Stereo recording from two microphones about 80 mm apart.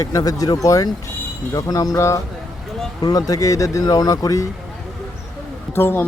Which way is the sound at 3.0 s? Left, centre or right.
Left.